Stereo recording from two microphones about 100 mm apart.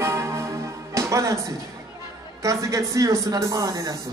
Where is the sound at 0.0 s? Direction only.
30° right (ahead or behind).